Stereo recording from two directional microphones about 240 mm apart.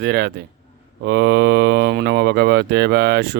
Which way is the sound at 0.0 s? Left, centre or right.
Right.